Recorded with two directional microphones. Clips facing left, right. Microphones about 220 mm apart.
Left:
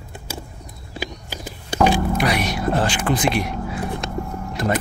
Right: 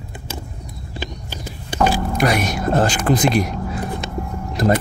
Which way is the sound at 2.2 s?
45° right (ahead or behind).